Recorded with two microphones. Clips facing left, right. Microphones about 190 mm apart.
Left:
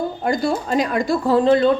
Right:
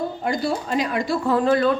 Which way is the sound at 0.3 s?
45° left (ahead or behind).